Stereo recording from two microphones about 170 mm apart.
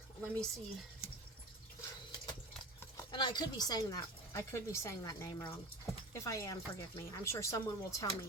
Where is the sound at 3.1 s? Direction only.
25° left (ahead or behind).